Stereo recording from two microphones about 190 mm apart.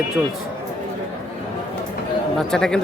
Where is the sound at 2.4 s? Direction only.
5° left (ahead or behind).